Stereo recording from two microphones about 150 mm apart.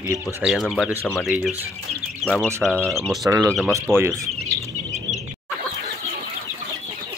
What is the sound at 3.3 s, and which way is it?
Speech, 20° right (ahead or behind).